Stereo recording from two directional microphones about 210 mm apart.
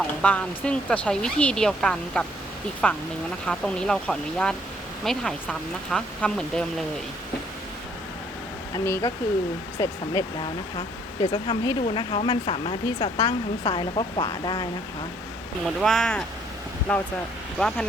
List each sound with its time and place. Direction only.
0.2 s speech: 5° left (ahead or behind)
8.7 s speech: 10° left (ahead or behind)
10.8 s speech: 25° left (ahead or behind)
15.6 s speech: centre (ahead or behind)